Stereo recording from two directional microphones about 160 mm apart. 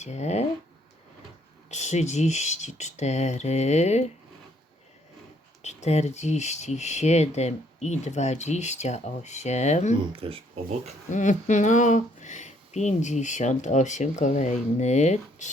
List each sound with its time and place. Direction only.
0.0 s speech: 45° left (ahead or behind)
1.7 s speech: 45° left (ahead or behind)
5.6 s speech: 45° left (ahead or behind)
10.2 s speech: 35° right (ahead or behind)
11.1 s speech: 50° left (ahead or behind)